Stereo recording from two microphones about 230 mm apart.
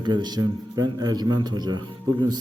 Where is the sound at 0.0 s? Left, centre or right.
Centre.